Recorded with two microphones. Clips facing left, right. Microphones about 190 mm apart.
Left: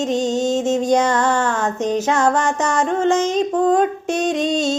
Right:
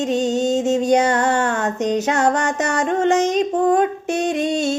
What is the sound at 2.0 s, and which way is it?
Music, 70° right (ahead or behind).